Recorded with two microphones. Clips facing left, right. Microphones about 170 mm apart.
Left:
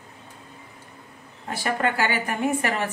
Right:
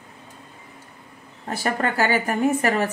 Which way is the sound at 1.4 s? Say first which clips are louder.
Right 1 dB; 40° right (ahead or behind).